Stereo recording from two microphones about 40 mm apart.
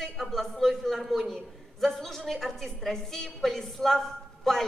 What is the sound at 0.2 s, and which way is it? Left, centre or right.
A man's voice, centre.